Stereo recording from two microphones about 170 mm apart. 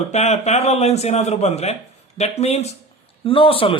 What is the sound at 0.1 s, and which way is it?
A man's voice, 40° left (ahead or behind).